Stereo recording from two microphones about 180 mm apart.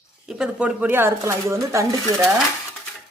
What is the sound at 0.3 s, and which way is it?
Speech, 5° right (ahead or behind).